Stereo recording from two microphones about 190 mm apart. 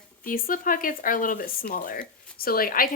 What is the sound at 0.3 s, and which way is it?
Speech, 50° left (ahead or behind).